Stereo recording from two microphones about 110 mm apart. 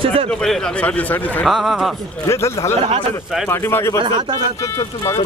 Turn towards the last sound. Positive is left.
turn(degrees=25)  # may be behind; listen again after turning